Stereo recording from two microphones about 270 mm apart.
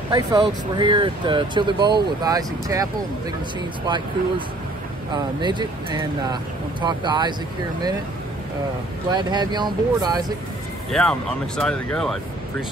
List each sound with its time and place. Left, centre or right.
0.1 s speech: centre
5.4 s speech: centre
9.1 s speech: centre
10.9 s speech: centre